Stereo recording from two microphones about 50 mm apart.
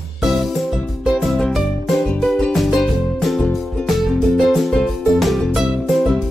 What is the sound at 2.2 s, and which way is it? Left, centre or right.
Music, centre.